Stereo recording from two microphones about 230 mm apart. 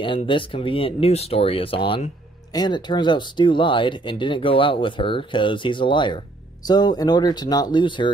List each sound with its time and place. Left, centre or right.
0.0 s speech: left